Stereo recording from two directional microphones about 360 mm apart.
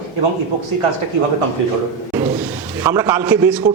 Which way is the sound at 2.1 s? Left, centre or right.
Centre.